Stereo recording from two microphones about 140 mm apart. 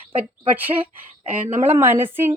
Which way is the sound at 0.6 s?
15° right (ahead or behind).